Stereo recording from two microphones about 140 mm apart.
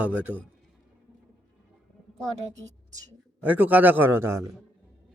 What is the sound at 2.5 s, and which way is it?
Speech, 25° right (ahead or behind).